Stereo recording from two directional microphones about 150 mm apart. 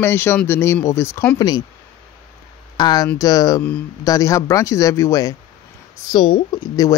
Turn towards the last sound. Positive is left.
turn(degrees=25)  # may be behind; listen again after turning